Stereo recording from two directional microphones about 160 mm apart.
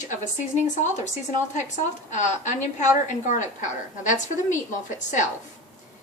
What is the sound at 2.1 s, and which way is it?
A woman's voice, 50° left (ahead or behind).